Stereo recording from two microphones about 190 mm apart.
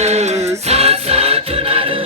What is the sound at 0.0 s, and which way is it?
Music, 35° right (ahead or behind).